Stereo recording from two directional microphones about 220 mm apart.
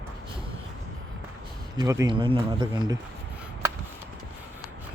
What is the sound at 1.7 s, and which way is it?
A man's voice, 15° right (ahead or behind).